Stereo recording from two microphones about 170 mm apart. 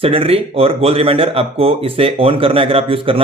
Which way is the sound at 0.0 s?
35° right (ahead or behind).